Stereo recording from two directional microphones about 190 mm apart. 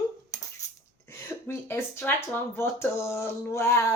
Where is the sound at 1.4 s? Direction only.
10° left (ahead or behind).